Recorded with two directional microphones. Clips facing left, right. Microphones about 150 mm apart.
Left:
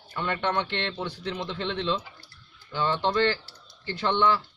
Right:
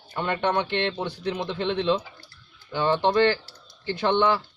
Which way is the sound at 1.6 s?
55° right (ahead or behind).